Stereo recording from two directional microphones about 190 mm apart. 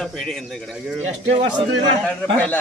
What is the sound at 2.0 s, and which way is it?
Speech, 5° left (ahead or behind).